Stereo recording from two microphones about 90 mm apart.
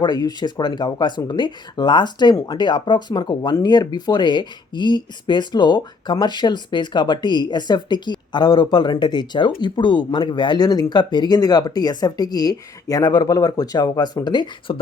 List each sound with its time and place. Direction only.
0.0 s speech: 50° left (ahead or behind)
14.7 s speech: 70° left (ahead or behind)